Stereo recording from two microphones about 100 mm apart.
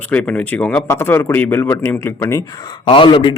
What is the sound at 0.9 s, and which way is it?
Speech, 25° left (ahead or behind).